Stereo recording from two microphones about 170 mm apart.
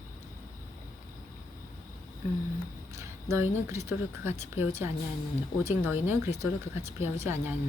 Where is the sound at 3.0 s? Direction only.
15° right (ahead or behind).